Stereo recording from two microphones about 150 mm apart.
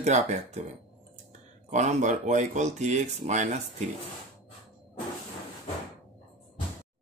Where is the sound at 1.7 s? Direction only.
50° right (ahead or behind).